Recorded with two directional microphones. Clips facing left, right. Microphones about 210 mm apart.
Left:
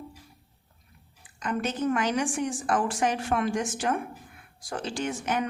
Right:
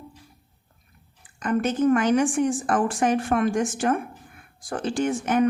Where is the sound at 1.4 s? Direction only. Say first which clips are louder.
Right 6 dB; 50° right (ahead or behind).